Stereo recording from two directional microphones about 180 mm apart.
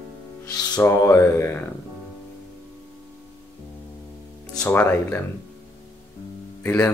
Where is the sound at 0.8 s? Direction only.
15° left (ahead or behind).